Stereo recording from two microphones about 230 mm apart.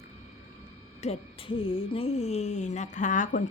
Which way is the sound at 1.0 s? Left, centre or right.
Left.